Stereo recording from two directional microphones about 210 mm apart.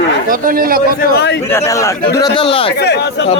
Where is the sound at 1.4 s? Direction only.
10° left (ahead or behind).